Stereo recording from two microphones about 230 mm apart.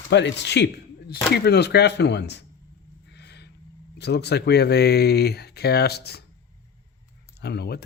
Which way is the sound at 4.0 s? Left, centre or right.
Left.